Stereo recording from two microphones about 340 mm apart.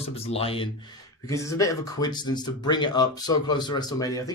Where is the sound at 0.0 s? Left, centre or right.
Centre.